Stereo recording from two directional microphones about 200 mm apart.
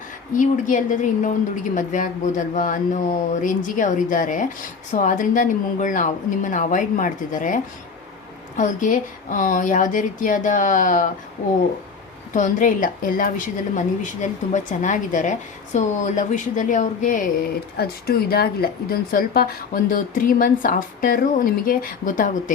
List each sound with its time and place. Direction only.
0.3 s speech: 40° left (ahead or behind)
12.3 s speech: 40° left (ahead or behind)
17.7 s speech: 50° left (ahead or behind)